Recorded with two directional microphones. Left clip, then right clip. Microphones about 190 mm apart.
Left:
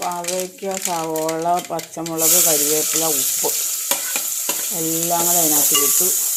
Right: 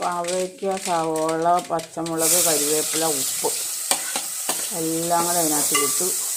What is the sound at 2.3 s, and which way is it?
Stir, 15° left (ahead or behind).